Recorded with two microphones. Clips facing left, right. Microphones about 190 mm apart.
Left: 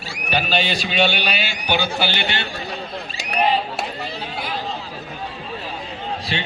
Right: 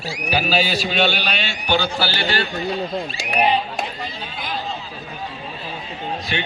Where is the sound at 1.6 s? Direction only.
15° left (ahead or behind).